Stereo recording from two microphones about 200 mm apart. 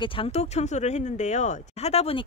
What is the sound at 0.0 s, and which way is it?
Speech, 25° left (ahead or behind).